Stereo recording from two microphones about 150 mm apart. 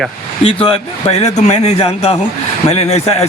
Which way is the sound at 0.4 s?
40° left (ahead or behind).